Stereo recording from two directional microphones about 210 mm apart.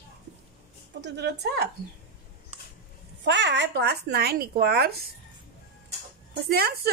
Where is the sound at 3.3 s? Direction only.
55° right (ahead or behind).